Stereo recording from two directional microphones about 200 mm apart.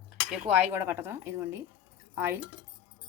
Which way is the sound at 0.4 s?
10° right (ahead or behind).